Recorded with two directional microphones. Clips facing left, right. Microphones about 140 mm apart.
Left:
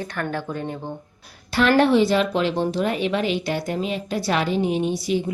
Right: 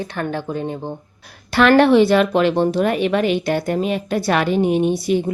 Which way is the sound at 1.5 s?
70° right (ahead or behind).